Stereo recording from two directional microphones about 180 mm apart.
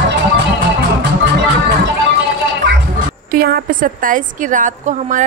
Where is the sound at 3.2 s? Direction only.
60° right (ahead or behind).